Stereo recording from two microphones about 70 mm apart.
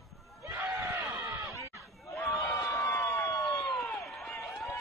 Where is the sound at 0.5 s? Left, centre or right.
Right.